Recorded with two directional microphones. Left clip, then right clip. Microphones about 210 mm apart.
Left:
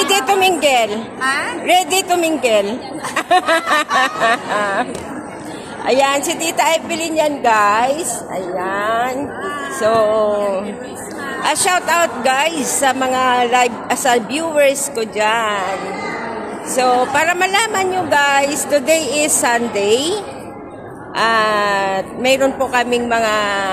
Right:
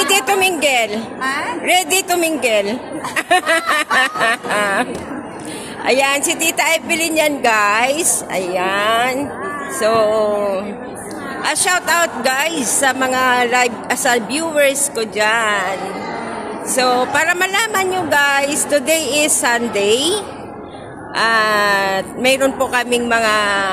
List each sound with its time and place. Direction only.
0.1 s a woman's voice: centre (ahead or behind)
5.9 s a woman's voice: centre (ahead or behind)
16.7 s a woman's voice: 5° left (ahead or behind)
21.2 s a woman's voice: centre (ahead or behind)